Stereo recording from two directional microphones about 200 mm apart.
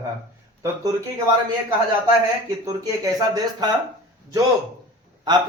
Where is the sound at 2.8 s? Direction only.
20° right (ahead or behind).